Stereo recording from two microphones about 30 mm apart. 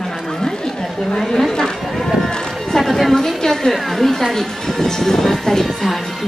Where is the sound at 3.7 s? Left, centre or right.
Centre.